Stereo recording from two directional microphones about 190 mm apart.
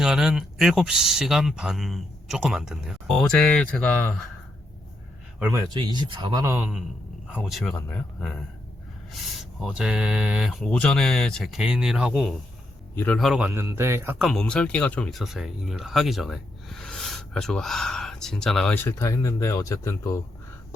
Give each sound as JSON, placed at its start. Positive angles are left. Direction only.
{"t": 0.0, "sound": "speech", "side_deg": 0}
{"t": 5.4, "sound": "speech", "side_deg": -15}
{"t": 6.5, "sound": "speech", "side_deg": -5}
{"t": 14.3, "sound": "speech", "side_deg": 5}